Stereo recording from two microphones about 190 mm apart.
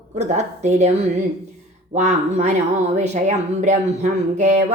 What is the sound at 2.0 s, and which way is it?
Speech, 35° right (ahead or behind).